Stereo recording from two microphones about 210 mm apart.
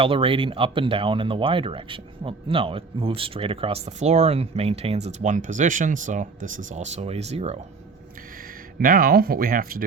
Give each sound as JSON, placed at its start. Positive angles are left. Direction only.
{"t": 0.0, "sound": "speech", "side_deg": -25}
{"t": 8.8, "sound": "speech", "side_deg": -45}